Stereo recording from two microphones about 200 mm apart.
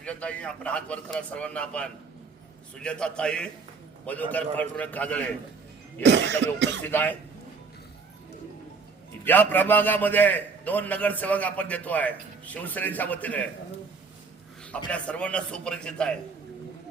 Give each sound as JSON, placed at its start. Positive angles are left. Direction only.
{"t": 0.0, "sound": "a man's voice", "side_deg": 5}
{"t": 6.0, "sound": "cough", "side_deg": -60}
{"t": 6.8, "sound": "a man's voice", "side_deg": 10}
{"t": 9.2, "sound": "a man's voice", "side_deg": 10}
{"t": 14.8, "sound": "a man's voice", "side_deg": 5}